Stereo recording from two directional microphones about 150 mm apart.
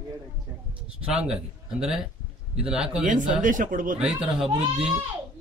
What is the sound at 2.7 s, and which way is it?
Speech, 5° right (ahead or behind).